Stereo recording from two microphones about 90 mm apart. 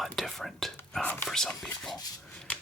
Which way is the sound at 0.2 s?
5° left (ahead or behind).